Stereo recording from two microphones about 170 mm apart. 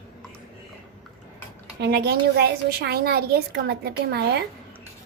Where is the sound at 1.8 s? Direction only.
70° right (ahead or behind).